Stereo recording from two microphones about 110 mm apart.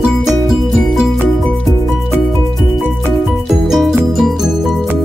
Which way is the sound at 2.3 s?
Centre (ahead or behind).